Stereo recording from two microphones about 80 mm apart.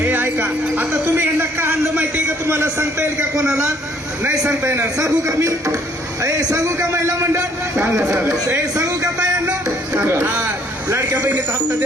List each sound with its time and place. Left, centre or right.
0.0 s music: right
4.2 s a man's voice: right
10.3 s a sound: right